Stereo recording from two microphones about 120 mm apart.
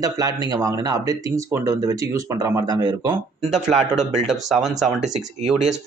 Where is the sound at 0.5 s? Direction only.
30° right (ahead or behind).